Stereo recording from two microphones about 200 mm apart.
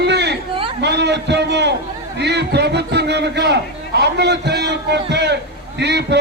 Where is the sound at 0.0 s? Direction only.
55° right (ahead or behind).